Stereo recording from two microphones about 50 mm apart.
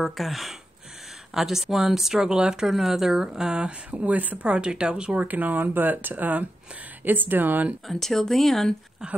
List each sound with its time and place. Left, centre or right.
0.0 s speech: centre
5.2 s speech: right
7.9 s speech: centre